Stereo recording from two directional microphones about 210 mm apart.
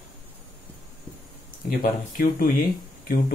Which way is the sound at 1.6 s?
40° left (ahead or behind).